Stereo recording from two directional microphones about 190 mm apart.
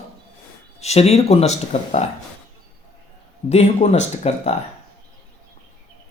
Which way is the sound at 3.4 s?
35° left (ahead or behind).